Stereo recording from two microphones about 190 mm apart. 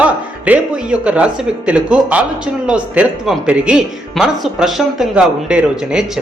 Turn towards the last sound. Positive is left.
turn(degrees=-5)  # may be behind; listen again after turning